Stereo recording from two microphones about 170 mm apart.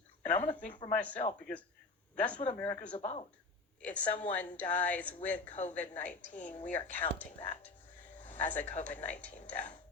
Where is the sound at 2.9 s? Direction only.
35° left (ahead or behind).